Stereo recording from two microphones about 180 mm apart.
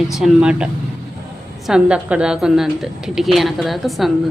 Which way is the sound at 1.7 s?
5° right (ahead or behind).